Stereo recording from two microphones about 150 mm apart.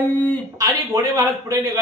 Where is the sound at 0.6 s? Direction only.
25° right (ahead or behind).